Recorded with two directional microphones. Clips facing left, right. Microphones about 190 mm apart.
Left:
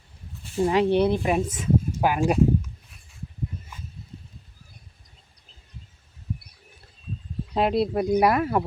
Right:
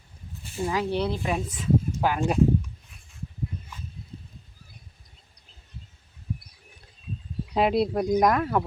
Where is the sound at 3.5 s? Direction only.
5° left (ahead or behind).